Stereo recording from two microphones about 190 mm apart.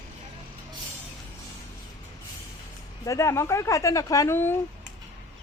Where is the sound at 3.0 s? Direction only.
15° left (ahead or behind).